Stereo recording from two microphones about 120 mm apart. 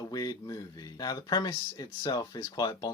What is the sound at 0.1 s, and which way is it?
Speech, 30° left (ahead or behind).